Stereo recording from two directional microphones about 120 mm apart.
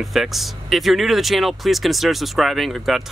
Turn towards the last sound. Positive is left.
turn(degrees=0)  # may be behind; listen again after turning